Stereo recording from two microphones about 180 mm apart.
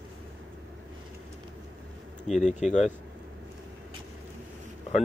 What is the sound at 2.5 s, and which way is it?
Speech, 40° left (ahead or behind).